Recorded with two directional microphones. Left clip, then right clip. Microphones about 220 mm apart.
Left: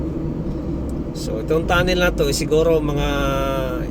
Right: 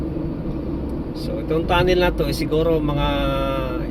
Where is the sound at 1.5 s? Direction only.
20° left (ahead or behind).